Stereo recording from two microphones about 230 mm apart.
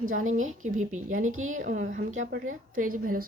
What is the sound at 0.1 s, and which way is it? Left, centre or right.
Speech, right.